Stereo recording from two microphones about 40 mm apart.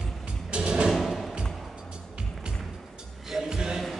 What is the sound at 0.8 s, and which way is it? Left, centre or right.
Music, centre.